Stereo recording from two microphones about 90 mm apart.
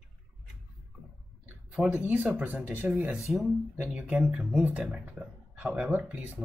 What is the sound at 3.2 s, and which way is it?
Speech, centre (ahead or behind).